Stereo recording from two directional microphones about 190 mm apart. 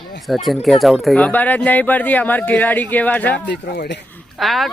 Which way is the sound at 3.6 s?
60° left (ahead or behind).